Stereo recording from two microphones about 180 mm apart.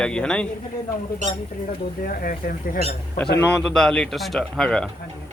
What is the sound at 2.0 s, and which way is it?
Speech, 50° left (ahead or behind).